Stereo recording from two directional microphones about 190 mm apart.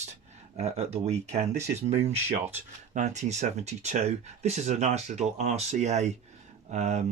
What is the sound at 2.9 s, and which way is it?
Speech, 40° right (ahead or behind).